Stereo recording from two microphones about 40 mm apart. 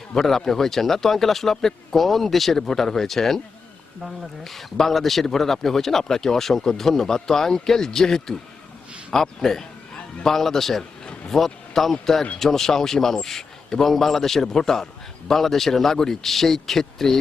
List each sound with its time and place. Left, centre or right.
0.2 s speech: centre
11.0 s a sound: left
11.3 s speech: centre